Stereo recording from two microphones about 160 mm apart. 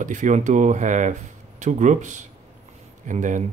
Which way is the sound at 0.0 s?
50° right (ahead or behind).